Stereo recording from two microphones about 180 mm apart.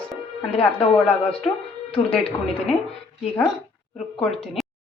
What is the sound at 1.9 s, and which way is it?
Speech, 30° left (ahead or behind).